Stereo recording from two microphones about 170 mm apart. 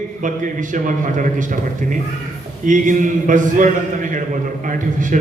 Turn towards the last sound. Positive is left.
turn(degrees=-50)  # may be behind; listen again after turning